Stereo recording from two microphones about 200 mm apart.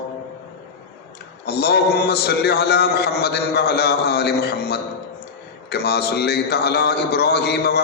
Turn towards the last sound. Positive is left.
turn(degrees=55)  # may be behind; listen again after turning